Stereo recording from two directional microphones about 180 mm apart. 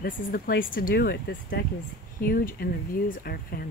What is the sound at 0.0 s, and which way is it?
Speech, 55° left (ahead or behind).